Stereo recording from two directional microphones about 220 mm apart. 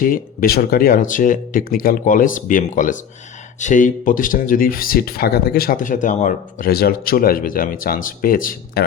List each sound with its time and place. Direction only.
0.0 s speech: 40° left (ahead or behind)